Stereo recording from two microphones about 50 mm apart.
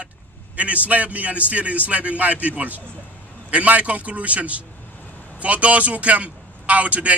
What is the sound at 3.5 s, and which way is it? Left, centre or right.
A man's voice, right.